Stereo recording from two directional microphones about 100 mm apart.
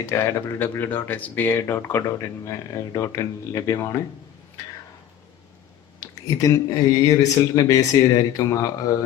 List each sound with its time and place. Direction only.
0.0 s speech: 25° left (ahead or behind)
6.0 s speech: 40° left (ahead or behind)